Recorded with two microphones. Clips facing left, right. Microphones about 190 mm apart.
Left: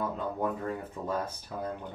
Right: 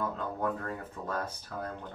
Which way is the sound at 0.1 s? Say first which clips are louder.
Left 1 dB; 10° left (ahead or behind).